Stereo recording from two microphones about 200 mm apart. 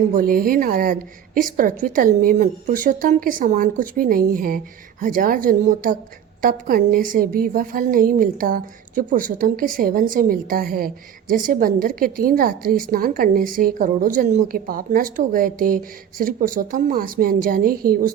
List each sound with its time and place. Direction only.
0.1 s a woman's voice: 45° right (ahead or behind)